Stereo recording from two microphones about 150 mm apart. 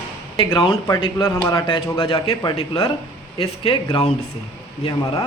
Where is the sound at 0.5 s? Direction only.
35° left (ahead or behind).